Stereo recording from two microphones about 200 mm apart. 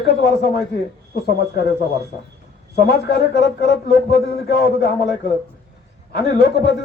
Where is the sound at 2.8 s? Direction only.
55° left (ahead or behind).